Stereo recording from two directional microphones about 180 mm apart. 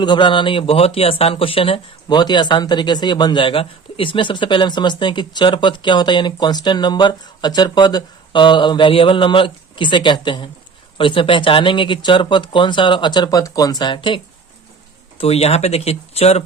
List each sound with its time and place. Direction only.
0.0 s speech: 25° left (ahead or behind)
15.2 s speech: 35° left (ahead or behind)